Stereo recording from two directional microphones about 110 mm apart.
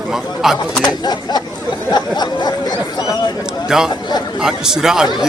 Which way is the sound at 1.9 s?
40° left (ahead or behind).